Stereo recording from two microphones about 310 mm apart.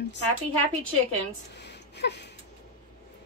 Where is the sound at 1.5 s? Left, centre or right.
Left.